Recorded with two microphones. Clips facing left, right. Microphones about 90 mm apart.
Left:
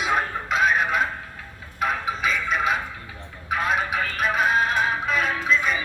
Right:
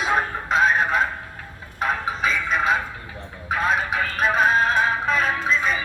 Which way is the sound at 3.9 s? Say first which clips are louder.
Right 2 dB; 40° right (ahead or behind).